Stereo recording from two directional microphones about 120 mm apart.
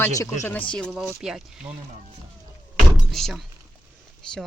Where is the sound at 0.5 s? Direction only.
10° left (ahead or behind).